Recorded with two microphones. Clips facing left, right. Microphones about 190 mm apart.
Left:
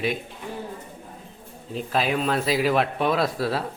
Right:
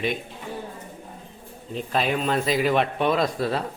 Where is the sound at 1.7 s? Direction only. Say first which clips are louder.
Even; centre (ahead or behind).